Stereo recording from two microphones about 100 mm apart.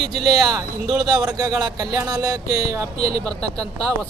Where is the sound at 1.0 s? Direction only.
40° right (ahead or behind).